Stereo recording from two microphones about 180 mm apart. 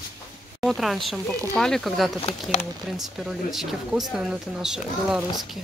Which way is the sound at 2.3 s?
40° left (ahead or behind).